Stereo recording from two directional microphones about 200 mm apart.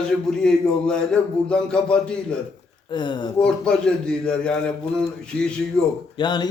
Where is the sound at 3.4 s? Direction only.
5° left (ahead or behind).